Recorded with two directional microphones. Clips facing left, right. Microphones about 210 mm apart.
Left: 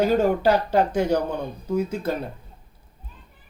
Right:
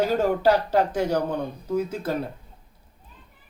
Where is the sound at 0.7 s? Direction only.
Centre (ahead or behind).